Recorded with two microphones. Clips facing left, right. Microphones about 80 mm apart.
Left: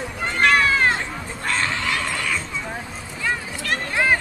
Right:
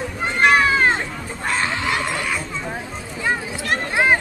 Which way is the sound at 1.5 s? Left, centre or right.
Centre.